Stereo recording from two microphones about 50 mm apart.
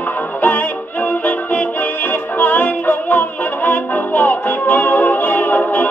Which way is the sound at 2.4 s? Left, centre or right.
Left.